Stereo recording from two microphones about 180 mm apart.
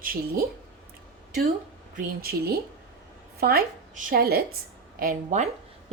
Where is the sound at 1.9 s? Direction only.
55° right (ahead or behind).